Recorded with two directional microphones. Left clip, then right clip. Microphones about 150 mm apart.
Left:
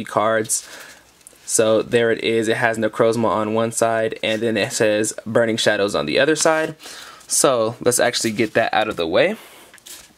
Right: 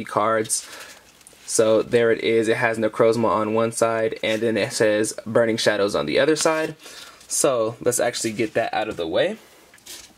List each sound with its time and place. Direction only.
0.0 s speech: 15° left (ahead or behind)
1.6 s speech: 15° left (ahead or behind)
6.4 s speech: 30° left (ahead or behind)